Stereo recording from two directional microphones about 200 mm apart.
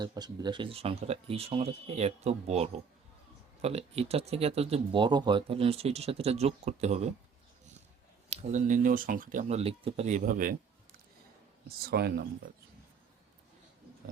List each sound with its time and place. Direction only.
0.0 s speech: 20° right (ahead or behind)
8.3 s speech: 35° right (ahead or behind); by 12.2 s 50° right (ahead or behind)